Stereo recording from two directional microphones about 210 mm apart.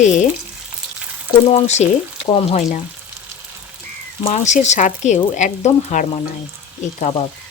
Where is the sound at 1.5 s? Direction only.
30° left (ahead or behind).